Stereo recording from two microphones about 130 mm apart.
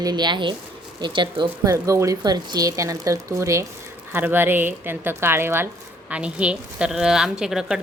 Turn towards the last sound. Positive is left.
turn(degrees=-5)  # may be behind; listen again after turning